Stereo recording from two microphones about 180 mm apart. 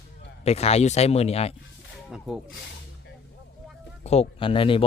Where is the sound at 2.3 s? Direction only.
Centre (ahead or behind).